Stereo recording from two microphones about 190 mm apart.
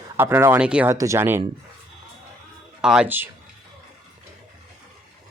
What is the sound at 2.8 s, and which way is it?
Speech, 5° right (ahead or behind).